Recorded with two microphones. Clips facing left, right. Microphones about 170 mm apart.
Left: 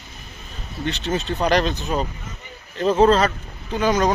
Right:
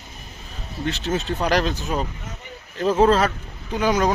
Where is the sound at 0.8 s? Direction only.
5° right (ahead or behind).